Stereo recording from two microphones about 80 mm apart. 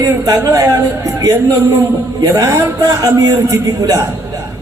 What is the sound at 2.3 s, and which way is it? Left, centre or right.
Speech, right.